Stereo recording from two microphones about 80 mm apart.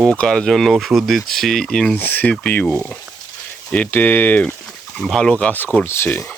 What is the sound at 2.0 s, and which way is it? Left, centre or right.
Speech, left.